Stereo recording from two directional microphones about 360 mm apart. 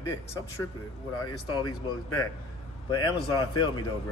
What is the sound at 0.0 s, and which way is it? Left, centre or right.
Speech, centre.